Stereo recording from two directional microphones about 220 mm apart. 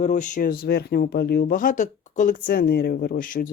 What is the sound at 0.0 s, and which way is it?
Speech, 35° left (ahead or behind).